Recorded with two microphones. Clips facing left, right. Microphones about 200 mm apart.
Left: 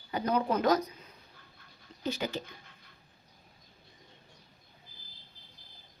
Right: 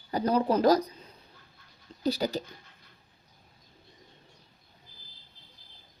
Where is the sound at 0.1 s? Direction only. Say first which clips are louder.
Right 4 dB; 35° right (ahead or behind).